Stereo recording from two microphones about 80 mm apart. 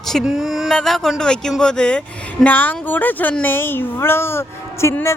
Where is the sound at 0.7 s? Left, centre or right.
Centre.